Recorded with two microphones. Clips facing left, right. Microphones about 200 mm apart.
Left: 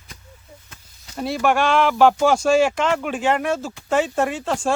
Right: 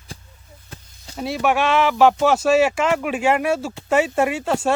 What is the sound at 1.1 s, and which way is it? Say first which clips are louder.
Speech: even; centre (ahead or behind).